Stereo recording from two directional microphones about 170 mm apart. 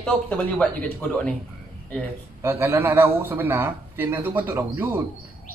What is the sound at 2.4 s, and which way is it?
A man's voice, 15° right (ahead or behind).